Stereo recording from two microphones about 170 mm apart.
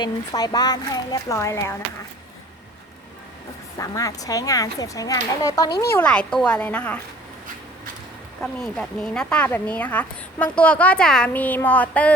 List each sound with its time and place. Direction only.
0.0 s speech: 25° left (ahead or behind)
3.8 s speech: 20° left (ahead or behind)
5.9 s speech: 10° left (ahead or behind)
8.4 s speech: 5° left (ahead or behind)